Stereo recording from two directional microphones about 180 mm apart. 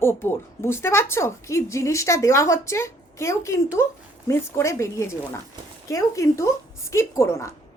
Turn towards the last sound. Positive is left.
turn(degrees=15)  # may be behind; listen again after turning